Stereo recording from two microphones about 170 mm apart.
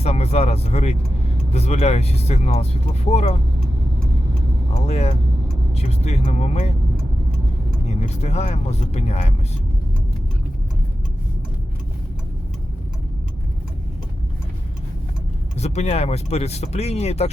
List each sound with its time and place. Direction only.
0.0 s speech: 40° left (ahead or behind)
4.9 s speech: 40° left (ahead or behind)
7.9 s speech: 40° left (ahead or behind)
15.5 s speech: 40° left (ahead or behind)